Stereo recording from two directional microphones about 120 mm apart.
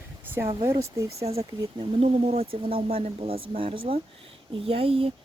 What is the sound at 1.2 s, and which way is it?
Speech, 60° right (ahead or behind).